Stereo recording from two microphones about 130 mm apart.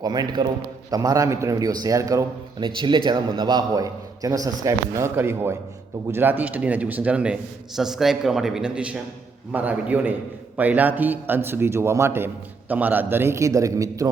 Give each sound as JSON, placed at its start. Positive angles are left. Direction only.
{"t": 0.0, "sound": "a man's voice", "side_deg": -30}
{"t": 2.6, "sound": "a man's voice", "side_deg": -40}